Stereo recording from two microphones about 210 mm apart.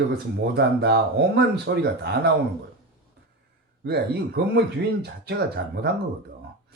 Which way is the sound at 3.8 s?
50° right (ahead or behind).